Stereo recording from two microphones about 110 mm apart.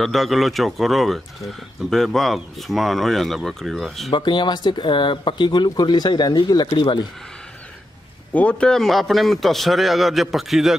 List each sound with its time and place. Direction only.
0.0 s speech: centre (ahead or behind)
4.1 s speech: 45° left (ahead or behind)
8.3 s speech: 10° left (ahead or behind)